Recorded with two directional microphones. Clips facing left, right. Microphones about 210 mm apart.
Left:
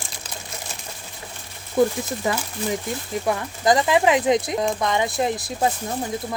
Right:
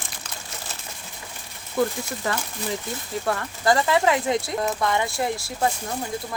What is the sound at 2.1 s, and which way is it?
A woman's voice, 15° left (ahead or behind).